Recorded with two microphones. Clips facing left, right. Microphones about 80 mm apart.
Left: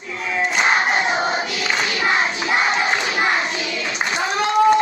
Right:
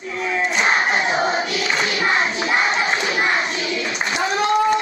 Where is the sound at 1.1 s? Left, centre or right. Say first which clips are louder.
Right 1 dB; right.